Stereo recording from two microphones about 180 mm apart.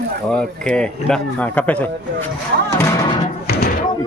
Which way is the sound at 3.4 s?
60° left (ahead or behind).